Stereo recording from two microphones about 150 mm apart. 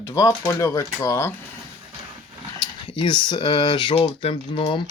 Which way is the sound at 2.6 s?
30° left (ahead or behind).